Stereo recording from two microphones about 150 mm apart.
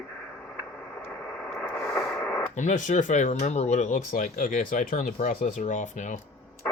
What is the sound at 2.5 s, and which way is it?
Speech, 55° left (ahead or behind).